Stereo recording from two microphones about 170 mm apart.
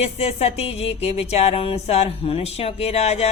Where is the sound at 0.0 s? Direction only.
35° left (ahead or behind).